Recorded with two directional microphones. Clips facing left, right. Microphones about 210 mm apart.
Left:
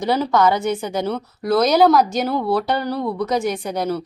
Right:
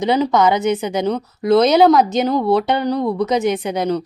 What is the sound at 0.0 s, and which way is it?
Speech, 20° right (ahead or behind).